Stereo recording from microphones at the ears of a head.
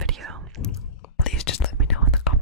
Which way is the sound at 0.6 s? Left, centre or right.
Left.